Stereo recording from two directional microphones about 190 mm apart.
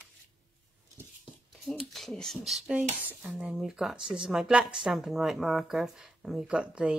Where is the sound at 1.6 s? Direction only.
Centre (ahead or behind).